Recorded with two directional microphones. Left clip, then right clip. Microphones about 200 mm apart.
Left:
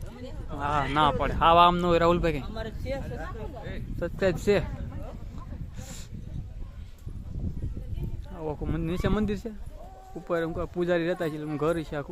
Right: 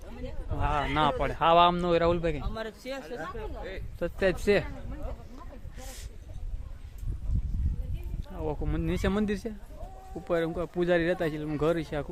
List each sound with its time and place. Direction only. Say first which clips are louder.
0.6 s speech: left 3 dB; 15° left (ahead or behind)
2.6 s speech: left 2 dB; 45° right (ahead or behind)
4.0 s speech: left 1 dB; 5° left (ahead or behind)
8.4 s a man's voice: left 1 dB; centre (ahead or behind)